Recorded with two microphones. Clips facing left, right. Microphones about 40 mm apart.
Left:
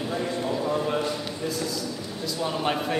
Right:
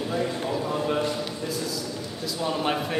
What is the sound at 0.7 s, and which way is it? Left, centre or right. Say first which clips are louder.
Speech: even; centre.